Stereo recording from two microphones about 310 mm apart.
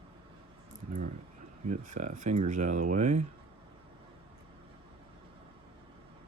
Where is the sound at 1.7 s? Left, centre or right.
Right.